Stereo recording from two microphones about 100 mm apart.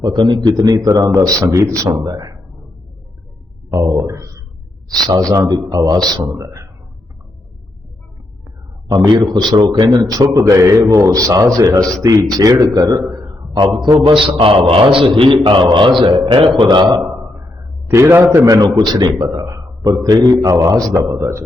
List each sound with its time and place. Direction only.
0.0 s a man's voice: 45° right (ahead or behind)
3.7 s a sound: 35° right (ahead or behind)
5.3 s a man's voice: 40° right (ahead or behind)
9.0 s a man's voice: 50° right (ahead or behind)
17.8 s a man's voice: 25° right (ahead or behind)
18.4 s a man's voice: 40° right (ahead or behind)
19.3 s a man's voice: 35° right (ahead or behind)